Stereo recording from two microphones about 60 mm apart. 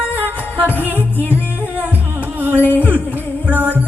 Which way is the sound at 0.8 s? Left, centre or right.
Right.